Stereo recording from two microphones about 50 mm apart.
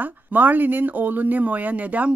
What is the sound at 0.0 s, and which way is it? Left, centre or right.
Speech, right.